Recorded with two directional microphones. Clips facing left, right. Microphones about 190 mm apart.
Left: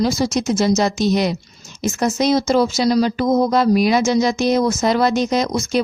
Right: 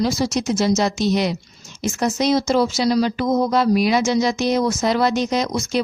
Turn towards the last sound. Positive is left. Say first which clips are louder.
# left 2 dB
turn(degrees=45)  # may be behind; listen again after turning